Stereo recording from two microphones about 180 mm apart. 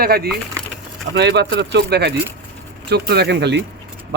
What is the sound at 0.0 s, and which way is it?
Speech, 60° right (ahead or behind).